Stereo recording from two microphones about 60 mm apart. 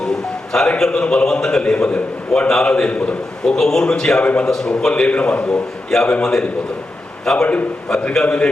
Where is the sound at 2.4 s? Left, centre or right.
Centre.